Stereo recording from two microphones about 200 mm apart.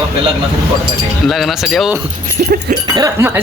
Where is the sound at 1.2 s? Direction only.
Centre (ahead or behind).